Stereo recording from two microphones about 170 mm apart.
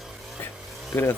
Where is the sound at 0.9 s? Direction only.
15° left (ahead or behind).